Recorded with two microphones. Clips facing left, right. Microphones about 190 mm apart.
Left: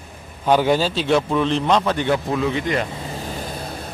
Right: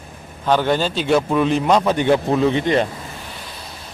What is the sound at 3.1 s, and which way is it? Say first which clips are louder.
Vehicle: left 7 dB; 40° left (ahead or behind).